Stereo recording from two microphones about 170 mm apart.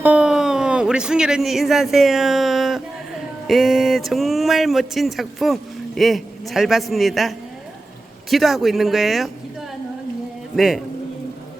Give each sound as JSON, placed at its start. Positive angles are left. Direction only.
{"t": 0.0, "sound": "speech", "side_deg": -5}
{"t": 10.5, "sound": "speech", "side_deg": 0}